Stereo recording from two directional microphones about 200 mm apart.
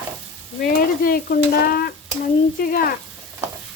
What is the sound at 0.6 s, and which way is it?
Stir, 45° left (ahead or behind).